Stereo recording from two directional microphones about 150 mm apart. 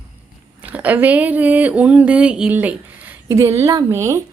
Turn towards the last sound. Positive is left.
turn(degrees=-20)  # may be behind; listen again after turning